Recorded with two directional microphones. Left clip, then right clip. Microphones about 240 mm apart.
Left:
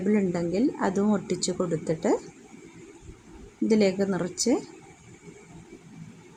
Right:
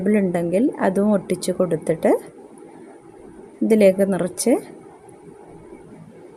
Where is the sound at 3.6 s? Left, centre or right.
Centre.